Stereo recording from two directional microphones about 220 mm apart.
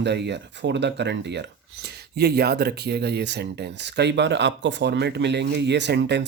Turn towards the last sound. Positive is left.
turn(degrees=-50)  # may be behind; listen again after turning